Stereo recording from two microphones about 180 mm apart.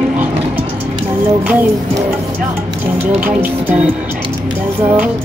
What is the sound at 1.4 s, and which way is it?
Music, 10° right (ahead or behind).